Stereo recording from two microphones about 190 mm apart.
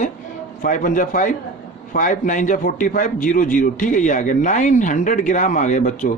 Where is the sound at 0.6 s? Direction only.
45° left (ahead or behind).